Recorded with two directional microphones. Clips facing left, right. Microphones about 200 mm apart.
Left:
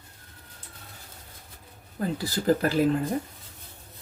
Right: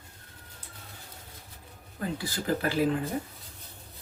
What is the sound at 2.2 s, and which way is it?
Speech, 40° left (ahead or behind).